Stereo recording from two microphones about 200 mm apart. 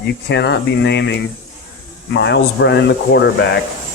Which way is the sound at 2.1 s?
60° left (ahead or behind).